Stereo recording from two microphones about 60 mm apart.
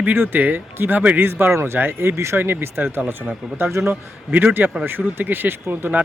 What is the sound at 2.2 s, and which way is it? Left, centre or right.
Speech, right.